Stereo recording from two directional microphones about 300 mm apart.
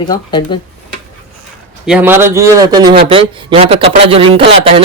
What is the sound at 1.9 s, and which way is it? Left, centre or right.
Speech, centre.